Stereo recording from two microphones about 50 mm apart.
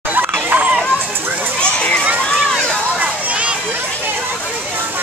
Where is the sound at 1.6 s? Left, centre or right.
Left.